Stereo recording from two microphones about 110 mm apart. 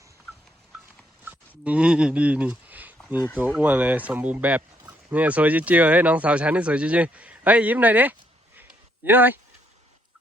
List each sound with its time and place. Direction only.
1.2 s speech: 10° right (ahead or behind)